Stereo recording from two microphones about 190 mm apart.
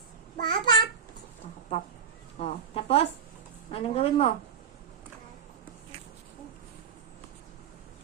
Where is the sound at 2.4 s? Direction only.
30° left (ahead or behind).